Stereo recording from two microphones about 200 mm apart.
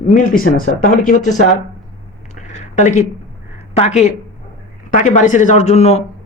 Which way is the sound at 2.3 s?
35° left (ahead or behind).